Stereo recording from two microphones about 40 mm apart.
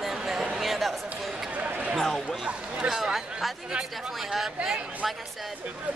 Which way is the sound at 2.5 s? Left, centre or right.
Right.